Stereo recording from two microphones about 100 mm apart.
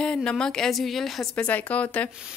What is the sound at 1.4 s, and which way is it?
Speech, 15° left (ahead or behind).